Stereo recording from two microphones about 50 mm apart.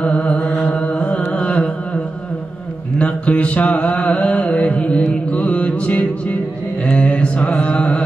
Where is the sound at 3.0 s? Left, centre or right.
Left.